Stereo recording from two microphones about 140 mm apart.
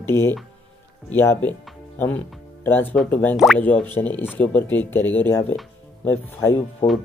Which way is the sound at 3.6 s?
10° left (ahead or behind).